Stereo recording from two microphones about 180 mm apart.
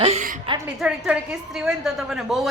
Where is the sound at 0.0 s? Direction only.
35° right (ahead or behind).